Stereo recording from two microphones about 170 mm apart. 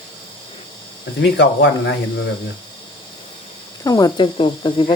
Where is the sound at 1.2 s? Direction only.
85° left.